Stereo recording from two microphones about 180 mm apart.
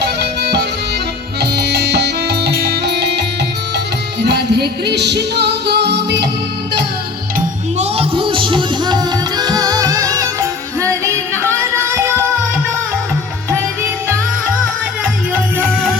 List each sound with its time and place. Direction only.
0.0 s music: 65° right (ahead or behind)
4.3 s music: 65° right (ahead or behind)
7.3 s music: 35° right (ahead or behind); by 12.1 s 15° right (ahead or behind)